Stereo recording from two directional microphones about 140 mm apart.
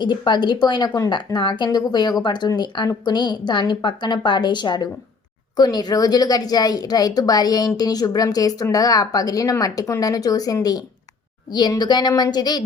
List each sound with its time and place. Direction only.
0.0 s a woman's voice: 30° left (ahead or behind)